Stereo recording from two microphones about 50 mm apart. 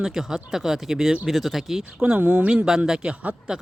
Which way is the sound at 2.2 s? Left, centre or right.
Right.